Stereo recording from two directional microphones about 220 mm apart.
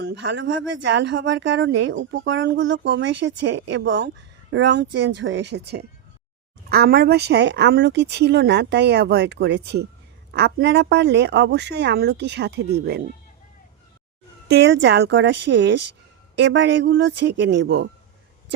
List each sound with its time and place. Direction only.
0.0 s speech: 50° right (ahead or behind)
14.5 s speech: 50° right (ahead or behind)